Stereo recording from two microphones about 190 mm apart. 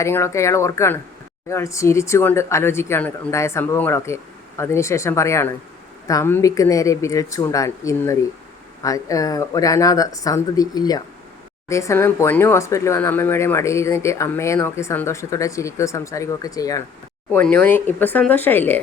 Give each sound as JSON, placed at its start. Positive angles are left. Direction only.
{"t": 0.0, "sound": "speech", "side_deg": 15}
{"t": 17.3, "sound": "speech", "side_deg": 10}